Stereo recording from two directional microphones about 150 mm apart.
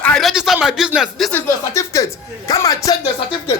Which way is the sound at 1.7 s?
20° left (ahead or behind).